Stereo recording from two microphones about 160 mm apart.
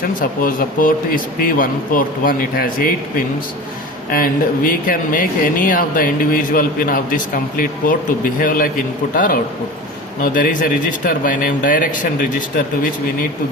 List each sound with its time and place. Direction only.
0.2 s speech: 60° left (ahead or behind)